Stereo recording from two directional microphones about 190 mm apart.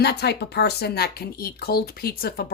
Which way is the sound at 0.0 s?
60° left (ahead or behind).